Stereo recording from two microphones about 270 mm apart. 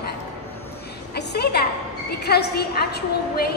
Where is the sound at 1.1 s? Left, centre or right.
Left.